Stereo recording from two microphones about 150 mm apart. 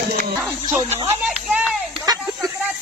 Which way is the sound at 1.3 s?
5° right (ahead or behind).